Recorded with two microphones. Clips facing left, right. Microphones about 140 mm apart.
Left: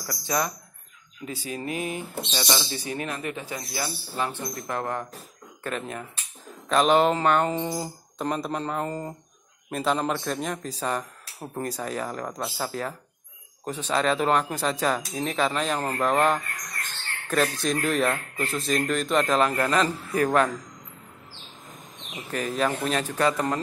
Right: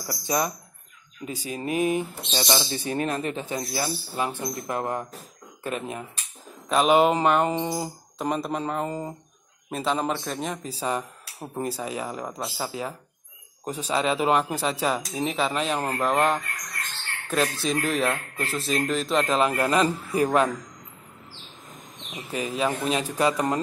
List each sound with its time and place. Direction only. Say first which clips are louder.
0.0 s speech: right 1 dB; 15° right (ahead or behind)
4.1 s speech: right 1 dB; 10° right (ahead or behind)
7.5 s speech: right 1 dB; 20° right (ahead or behind)
8.2 s speech: right 1 dB; 5° right (ahead or behind)
22.1 s speech: even; 10° right (ahead or behind)